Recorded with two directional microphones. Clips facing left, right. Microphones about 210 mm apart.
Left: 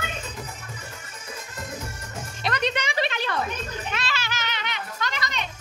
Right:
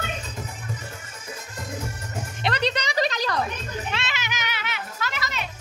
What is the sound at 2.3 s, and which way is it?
Music, 30° right (ahead or behind).